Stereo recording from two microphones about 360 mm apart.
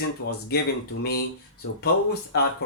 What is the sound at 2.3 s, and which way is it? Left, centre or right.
Speech, left.